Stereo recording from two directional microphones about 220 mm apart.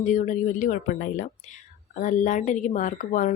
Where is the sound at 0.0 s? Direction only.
35° left (ahead or behind).